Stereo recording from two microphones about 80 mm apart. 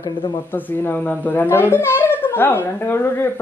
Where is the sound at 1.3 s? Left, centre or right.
Left.